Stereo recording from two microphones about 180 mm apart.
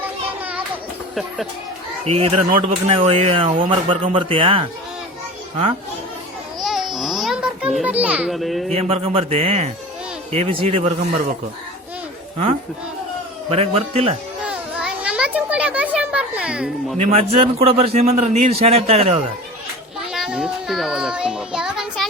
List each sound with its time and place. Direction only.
2.0 s a man's voice: 35° right (ahead or behind)
6.6 s babbling: centre (ahead or behind)
7.8 s a child's voice: 10° right (ahead or behind)
8.7 s a man's voice: 35° right (ahead or behind)
13.5 s a man's voice: 35° right (ahead or behind)
14.4 s a child's voice: 5° right (ahead or behind)
17.0 s a man's voice: 35° right (ahead or behind)
20.1 s child singing: 5° right (ahead or behind)